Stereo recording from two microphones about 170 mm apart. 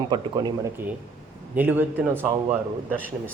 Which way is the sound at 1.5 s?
10° right (ahead or behind).